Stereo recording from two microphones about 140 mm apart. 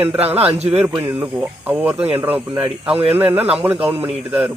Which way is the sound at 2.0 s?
45° right (ahead or behind).